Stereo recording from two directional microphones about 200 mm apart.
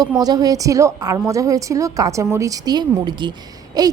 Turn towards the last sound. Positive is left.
turn(degrees=-20)  # may be behind; listen again after turning